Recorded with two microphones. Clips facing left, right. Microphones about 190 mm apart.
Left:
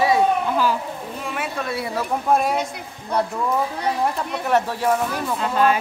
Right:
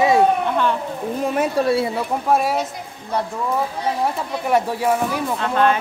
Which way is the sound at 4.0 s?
10° right (ahead or behind).